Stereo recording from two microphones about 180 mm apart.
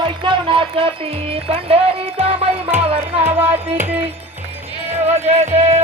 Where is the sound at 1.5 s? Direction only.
30° right (ahead or behind).